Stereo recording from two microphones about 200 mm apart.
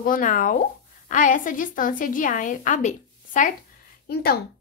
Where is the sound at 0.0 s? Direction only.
45° left (ahead or behind).